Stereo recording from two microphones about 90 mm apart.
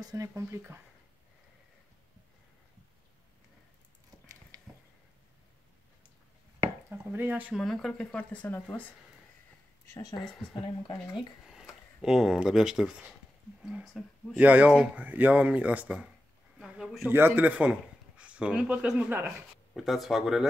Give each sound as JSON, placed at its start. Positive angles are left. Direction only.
{"t": 0.0, "sound": "speech", "side_deg": -40}
{"t": 0.3, "sound": "speech", "side_deg": -30}
{"t": 4.5, "sound": "a sound", "side_deg": -40}
{"t": 6.9, "sound": "speech", "side_deg": -20}
{"t": 7.5, "sound": "speech", "side_deg": 0}
{"t": 8.2, "sound": "speech", "side_deg": 15}
{"t": 9.8, "sound": "speech", "side_deg": 35}
{"t": 11.1, "sound": "speech", "side_deg": -5}
{"t": 14.3, "sound": "speech", "side_deg": -15}
{"t": 17.1, "sound": "speech", "side_deg": -20}
{"t": 19.0, "sound": "speech", "side_deg": -25}
{"t": 19.7, "sound": "speech", "side_deg": 0}